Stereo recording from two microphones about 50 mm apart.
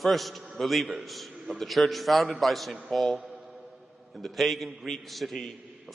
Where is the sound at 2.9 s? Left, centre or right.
Centre.